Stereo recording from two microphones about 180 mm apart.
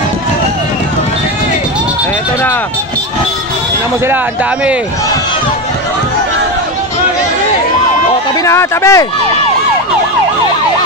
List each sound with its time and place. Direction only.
8.5 s speech: 15° left (ahead or behind)